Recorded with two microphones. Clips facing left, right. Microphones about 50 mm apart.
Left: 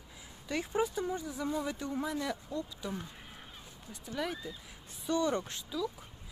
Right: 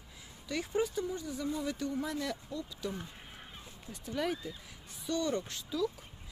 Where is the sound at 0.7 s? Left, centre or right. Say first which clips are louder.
Even; left.